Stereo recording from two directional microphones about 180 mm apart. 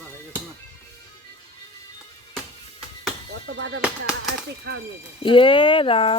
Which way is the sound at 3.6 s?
75° right (ahead or behind).